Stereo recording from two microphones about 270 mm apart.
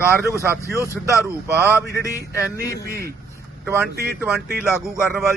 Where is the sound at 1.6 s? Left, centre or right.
Centre.